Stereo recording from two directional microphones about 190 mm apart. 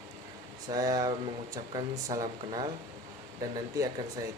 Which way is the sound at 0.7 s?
20° right (ahead or behind).